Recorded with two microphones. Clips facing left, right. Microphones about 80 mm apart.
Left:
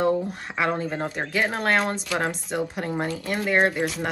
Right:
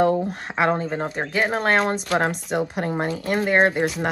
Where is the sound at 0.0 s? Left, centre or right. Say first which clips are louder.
Right 3 dB; right.